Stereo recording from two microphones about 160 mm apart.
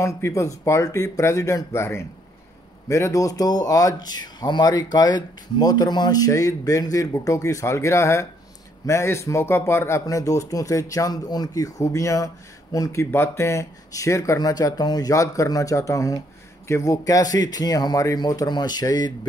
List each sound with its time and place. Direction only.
0.0 s speech: 20° left (ahead or behind)